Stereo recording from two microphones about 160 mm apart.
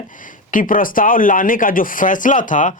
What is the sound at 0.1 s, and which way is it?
Speech, 55° left (ahead or behind).